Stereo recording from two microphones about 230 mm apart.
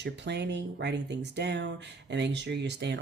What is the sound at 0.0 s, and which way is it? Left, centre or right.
Speech, right.